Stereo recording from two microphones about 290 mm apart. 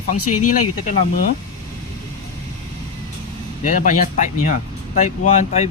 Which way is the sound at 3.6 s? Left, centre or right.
Left.